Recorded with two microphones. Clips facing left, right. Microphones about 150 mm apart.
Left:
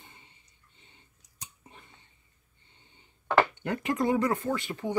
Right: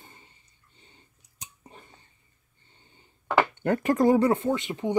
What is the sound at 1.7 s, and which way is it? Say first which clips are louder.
Whispering: right 4 dB; 35° right (ahead or behind).